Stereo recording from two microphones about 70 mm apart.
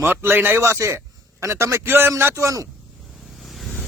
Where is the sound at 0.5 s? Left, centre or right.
Right.